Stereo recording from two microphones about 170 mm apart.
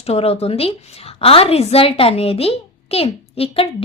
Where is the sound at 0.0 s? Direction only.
35° left (ahead or behind).